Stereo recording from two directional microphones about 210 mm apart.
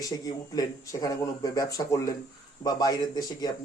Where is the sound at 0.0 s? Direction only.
15° left (ahead or behind).